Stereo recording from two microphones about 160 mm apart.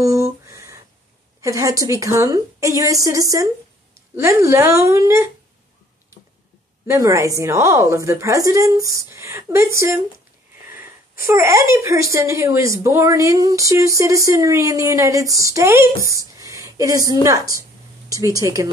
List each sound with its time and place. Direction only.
0.0 s a sound: 20° right (ahead or behind)
1.4 s speech: 20° right (ahead or behind)
6.9 s speech: 20° right (ahead or behind)
11.2 s speech: 20° right (ahead or behind)